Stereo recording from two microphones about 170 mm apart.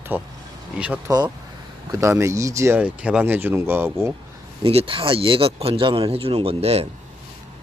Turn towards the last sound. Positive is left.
turn(degrees=-35)  # may be behind; listen again after turning